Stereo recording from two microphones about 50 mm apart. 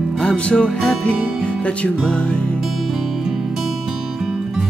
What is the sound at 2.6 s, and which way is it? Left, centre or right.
Music, centre.